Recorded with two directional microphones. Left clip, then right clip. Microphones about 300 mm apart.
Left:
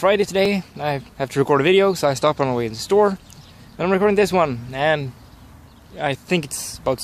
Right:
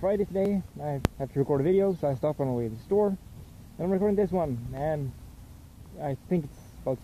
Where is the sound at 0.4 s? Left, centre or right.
Centre.